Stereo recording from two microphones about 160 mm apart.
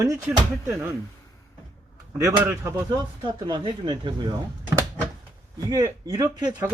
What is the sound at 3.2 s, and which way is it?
Speech, 30° right (ahead or behind).